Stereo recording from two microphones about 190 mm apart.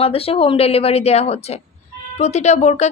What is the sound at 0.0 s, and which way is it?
Speech, 30° left (ahead or behind).